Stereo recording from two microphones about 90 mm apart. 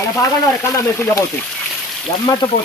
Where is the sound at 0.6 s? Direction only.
35° left (ahead or behind).